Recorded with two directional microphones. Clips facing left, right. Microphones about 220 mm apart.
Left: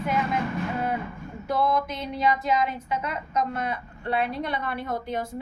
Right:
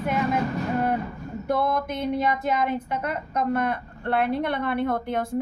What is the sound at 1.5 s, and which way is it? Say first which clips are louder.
A woman's voice: even; 55° right (ahead or behind).